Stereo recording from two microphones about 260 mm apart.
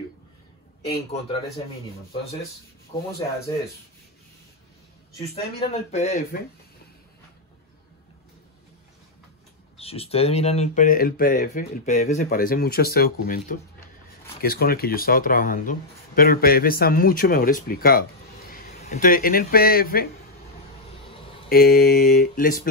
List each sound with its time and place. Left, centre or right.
2.9 s speech: centre
5.3 s speech: left
9.8 s speech: left
21.5 s speech: left